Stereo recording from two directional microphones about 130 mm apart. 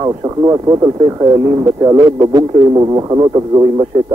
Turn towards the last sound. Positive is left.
turn(degrees=-30)  # may be behind; listen again after turning